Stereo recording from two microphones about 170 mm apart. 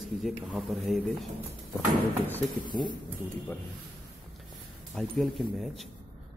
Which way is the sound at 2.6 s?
25° left (ahead or behind).